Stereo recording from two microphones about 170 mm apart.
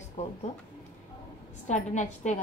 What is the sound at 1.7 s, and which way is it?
Speech, 45° left (ahead or behind).